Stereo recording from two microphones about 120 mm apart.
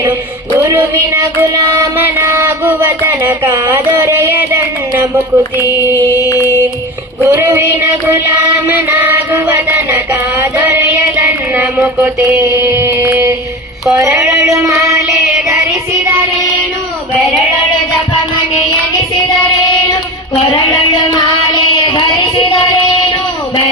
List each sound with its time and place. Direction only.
0.6 s a sound: 20° right (ahead or behind)
1.1 s music: 20° right (ahead or behind)
7.3 s music: 20° right (ahead or behind)
11.5 s mantra: 15° right (ahead or behind)
12.4 s chant: 20° right (ahead or behind)